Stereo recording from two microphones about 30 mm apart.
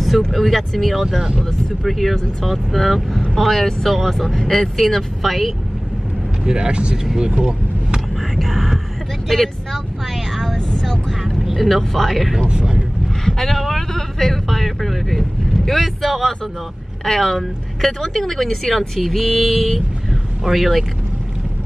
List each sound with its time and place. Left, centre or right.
0.3 s speech: centre
6.4 s speech: right
7.2 s vehicle: right
8.4 s speech: centre
9.3 s vehicle: centre
10.8 s speech: centre
15.5 s vehicle: centre
15.8 s speech: centre